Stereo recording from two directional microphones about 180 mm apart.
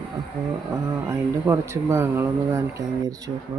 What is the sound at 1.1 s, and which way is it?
Speech, 15° right (ahead or behind).